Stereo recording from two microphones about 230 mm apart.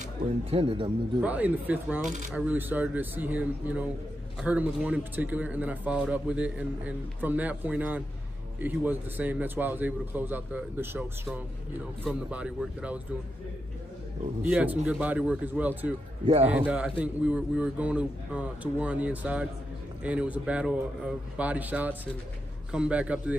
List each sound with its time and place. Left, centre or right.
0.0 s speech: right
1.2 s a man's voice: centre
2.0 s speech: right
2.3 s a man's voice: centre
14.5 s a man's voice: centre